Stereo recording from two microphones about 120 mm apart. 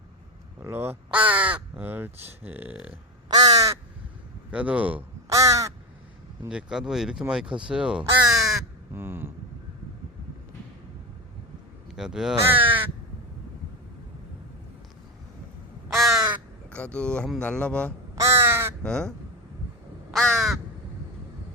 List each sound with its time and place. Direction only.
0.6 s speech: 20° right (ahead or behind)
3.2 s crow: 35° right (ahead or behind)
4.5 s speech: 10° right (ahead or behind)
5.3 s crow: 25° right (ahead or behind)
6.5 s speech: 5° right (ahead or behind)
8.9 s speech: 20° right (ahead or behind)
11.9 s speech: 5° right (ahead or behind)
12.4 s speech: 15° right (ahead or behind)
15.9 s crow: centre (ahead or behind)
16.6 s speech: 10° left (ahead or behind)
18.1 s crow: 25° right (ahead or behind)
18.8 s speech: 5° left (ahead or behind)
20.1 s crow: 5° left (ahead or behind)